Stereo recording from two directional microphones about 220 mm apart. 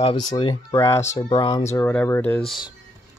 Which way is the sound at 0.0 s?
20° left (ahead or behind).